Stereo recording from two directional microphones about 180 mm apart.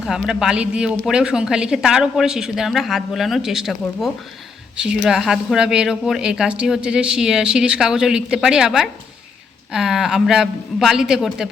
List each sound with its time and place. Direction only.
0.0 s speech: 5° right (ahead or behind)